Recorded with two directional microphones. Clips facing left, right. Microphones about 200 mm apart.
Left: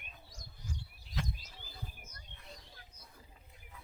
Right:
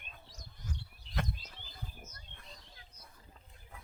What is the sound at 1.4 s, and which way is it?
Chirp, 10° left (ahead or behind).